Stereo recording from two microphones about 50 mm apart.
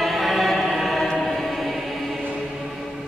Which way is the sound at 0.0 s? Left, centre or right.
Centre.